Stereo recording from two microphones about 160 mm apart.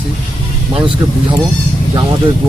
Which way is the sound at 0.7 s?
30° right (ahead or behind).